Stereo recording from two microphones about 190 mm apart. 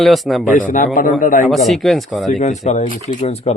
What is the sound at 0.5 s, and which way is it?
Speech, 45° left (ahead or behind).